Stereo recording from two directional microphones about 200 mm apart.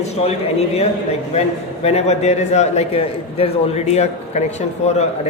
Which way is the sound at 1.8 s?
30° left (ahead or behind).